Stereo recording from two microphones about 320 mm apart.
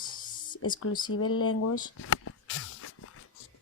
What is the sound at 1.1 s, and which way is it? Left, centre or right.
Speech, left.